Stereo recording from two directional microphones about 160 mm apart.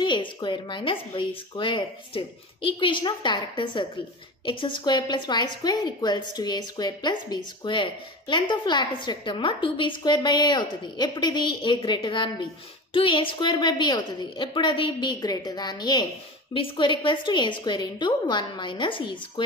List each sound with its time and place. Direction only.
0.0 s a woman's voice: 30° left (ahead or behind)